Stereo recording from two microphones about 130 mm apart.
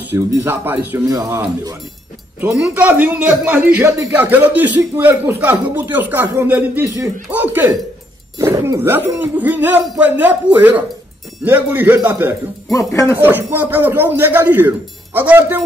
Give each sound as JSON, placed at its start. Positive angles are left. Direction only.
{"t": 0.3, "sound": "a man's voice", "side_deg": -15}
{"t": 12.7, "sound": "speech", "side_deg": 25}
{"t": 13.2, "sound": "a man's voice", "side_deg": -15}